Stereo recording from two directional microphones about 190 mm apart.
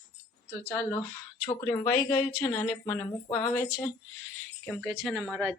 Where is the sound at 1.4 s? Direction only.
20° left (ahead or behind).